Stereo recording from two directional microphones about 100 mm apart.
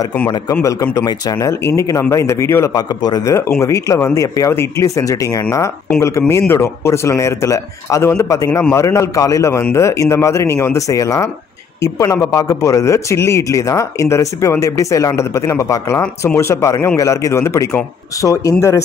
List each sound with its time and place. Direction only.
0.6 s a man's voice: 30° left (ahead or behind)
1.0 s speech: 45° left (ahead or behind)
1.5 s a man's voice: 30° left (ahead or behind)
2.7 s a man's voice: 40° left (ahead or behind)